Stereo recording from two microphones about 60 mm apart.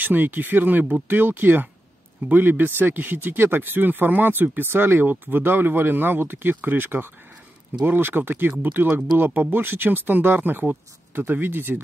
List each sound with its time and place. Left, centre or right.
0.0 s speech: right